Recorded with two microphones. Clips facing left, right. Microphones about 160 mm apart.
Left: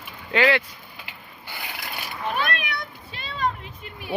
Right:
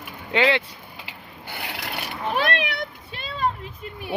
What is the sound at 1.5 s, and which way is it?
Speech, 70° right (ahead or behind).